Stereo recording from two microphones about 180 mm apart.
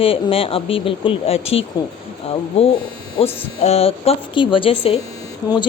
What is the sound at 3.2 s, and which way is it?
A woman's voice, 35° left (ahead or behind).